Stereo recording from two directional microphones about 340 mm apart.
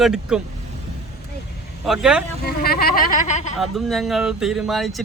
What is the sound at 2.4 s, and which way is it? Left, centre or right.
Speech, left.